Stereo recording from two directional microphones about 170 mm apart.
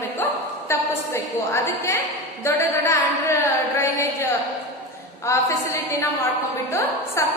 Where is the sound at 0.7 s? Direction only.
15° left (ahead or behind).